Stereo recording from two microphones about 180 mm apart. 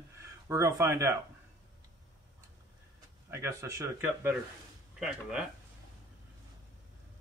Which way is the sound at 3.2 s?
15° right (ahead or behind).